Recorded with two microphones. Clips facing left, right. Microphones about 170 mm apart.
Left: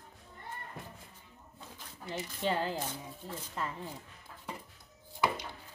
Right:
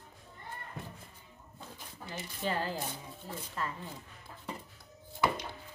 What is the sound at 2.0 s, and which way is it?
A woman's voice, 25° left (ahead or behind).